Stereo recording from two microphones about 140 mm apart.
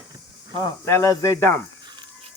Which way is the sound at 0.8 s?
20° left (ahead or behind).